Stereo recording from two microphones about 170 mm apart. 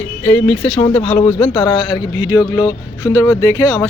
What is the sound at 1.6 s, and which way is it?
Speech, 25° left (ahead or behind).